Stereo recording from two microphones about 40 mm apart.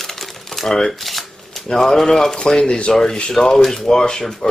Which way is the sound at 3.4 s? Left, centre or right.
Centre.